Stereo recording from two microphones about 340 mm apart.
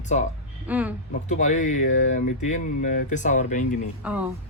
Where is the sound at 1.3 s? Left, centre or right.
Left.